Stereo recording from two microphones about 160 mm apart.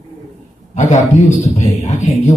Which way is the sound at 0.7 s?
50° left (ahead or behind).